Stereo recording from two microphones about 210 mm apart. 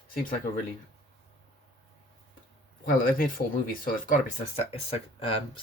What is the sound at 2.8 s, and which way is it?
Speech, 40° left (ahead or behind).